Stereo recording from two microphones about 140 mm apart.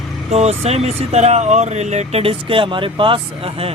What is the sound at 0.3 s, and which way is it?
Speech, 50° right (ahead or behind).